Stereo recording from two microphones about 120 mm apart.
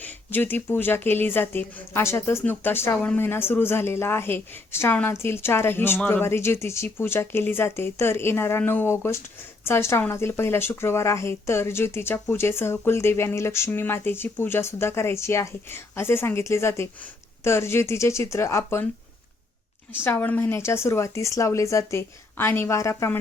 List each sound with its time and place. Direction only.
0.0 s speech: 15° left (ahead or behind)
20.1 s speech: 15° left (ahead or behind)